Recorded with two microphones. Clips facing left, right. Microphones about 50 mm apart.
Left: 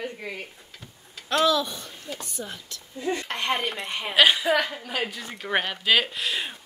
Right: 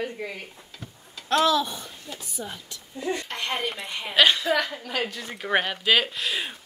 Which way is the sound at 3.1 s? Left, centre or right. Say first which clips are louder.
Left 3 dB; left.